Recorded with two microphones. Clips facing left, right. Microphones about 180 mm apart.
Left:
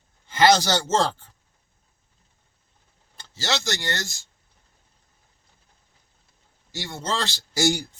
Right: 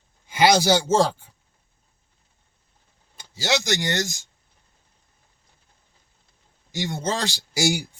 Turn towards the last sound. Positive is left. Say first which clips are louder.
# even
turn(degrees=-10)  # may be behind; listen again after turning